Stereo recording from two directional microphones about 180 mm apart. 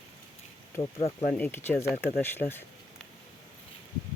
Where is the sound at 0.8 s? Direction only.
35° left (ahead or behind).